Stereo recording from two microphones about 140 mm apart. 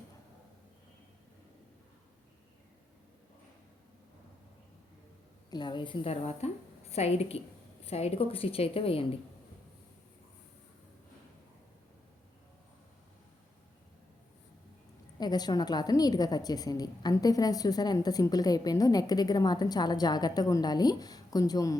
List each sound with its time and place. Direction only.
5.5 s a woman's voice: 30° left (ahead or behind)
15.2 s a woman's voice: 30° left (ahead or behind)